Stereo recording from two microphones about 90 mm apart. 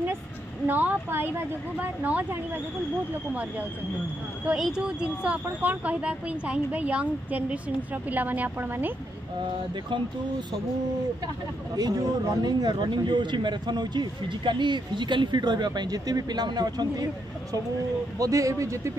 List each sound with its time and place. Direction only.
0.7 s a woman's voice: 20° right (ahead or behind)
4.6 s a woman's voice: 5° right (ahead or behind); by 8.9 s 20° right (ahead or behind)
11.7 s speech: 45° right (ahead or behind)
18.2 s speech: 40° right (ahead or behind)